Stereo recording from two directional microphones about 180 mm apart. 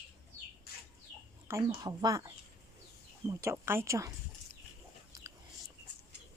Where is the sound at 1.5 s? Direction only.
20° right (ahead or behind).